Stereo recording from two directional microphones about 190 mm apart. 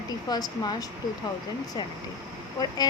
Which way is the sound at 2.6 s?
20° left (ahead or behind).